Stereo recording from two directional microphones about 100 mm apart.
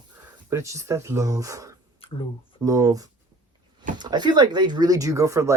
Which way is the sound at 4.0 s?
45° right (ahead or behind).